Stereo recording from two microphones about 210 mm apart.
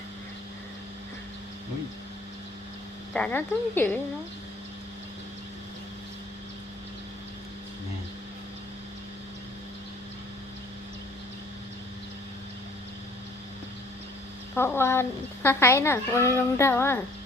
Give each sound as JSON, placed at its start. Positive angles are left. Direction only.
{"t": 3.1, "sound": "speech", "side_deg": 5}
{"t": 14.5, "sound": "speech", "side_deg": 10}